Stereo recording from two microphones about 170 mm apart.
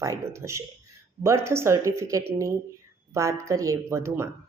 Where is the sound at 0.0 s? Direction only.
15° right (ahead or behind).